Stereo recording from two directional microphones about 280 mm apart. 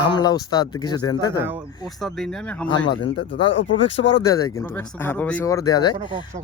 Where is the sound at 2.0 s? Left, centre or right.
Centre.